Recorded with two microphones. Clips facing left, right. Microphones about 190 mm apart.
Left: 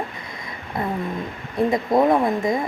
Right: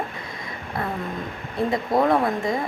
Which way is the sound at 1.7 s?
20° left (ahead or behind).